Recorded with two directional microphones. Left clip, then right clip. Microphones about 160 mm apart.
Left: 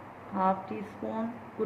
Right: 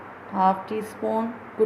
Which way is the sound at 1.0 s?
65° right (ahead or behind).